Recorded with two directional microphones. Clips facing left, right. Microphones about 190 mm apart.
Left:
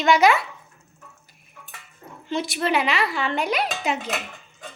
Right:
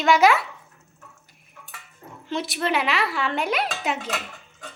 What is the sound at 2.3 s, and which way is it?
Speech, centre (ahead or behind).